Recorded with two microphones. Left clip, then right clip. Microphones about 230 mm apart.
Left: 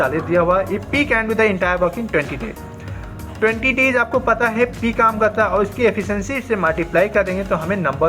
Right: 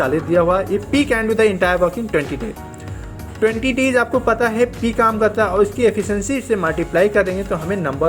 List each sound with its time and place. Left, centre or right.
0.3 s a woman's voice: right
3.4 s a woman's voice: right